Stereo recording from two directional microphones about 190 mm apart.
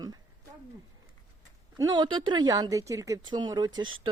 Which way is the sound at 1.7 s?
20° right (ahead or behind).